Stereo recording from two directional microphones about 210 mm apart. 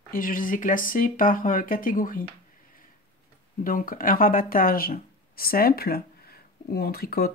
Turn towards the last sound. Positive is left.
turn(degrees=45)  # may be behind; listen again after turning